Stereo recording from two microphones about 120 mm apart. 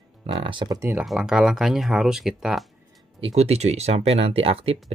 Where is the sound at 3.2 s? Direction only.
60° right (ahead or behind).